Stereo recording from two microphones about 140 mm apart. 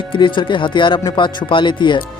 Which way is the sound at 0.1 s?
35° left (ahead or behind).